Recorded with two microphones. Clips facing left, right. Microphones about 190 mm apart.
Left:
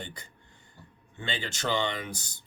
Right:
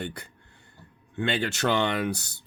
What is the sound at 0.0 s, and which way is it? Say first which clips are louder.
Speech: right 7 dB; 65° right (ahead or behind).